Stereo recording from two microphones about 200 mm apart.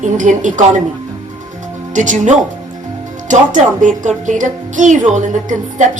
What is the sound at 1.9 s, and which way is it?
Speech, 40° right (ahead or behind).